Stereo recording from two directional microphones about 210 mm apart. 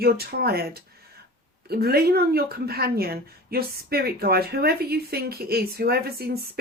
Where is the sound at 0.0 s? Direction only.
45° right (ahead or behind).